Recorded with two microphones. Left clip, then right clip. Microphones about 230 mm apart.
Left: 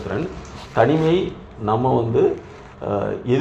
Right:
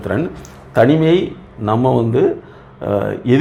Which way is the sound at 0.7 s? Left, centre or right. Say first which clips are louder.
Right 5 dB; right.